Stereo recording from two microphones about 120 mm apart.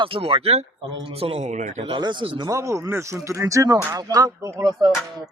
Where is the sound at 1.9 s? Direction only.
40° right (ahead or behind).